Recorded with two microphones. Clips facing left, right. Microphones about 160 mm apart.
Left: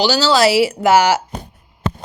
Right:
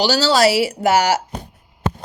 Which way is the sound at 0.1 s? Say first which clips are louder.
Left 1 dB; 40° right (ahead or behind).